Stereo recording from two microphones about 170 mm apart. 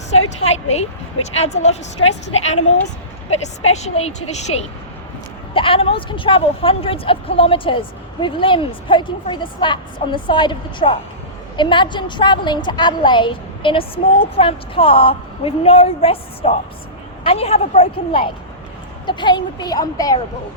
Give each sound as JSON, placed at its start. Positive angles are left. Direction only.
{"t": 0.1, "sound": "speech", "side_deg": 40}
{"t": 5.5, "sound": "speech", "side_deg": 30}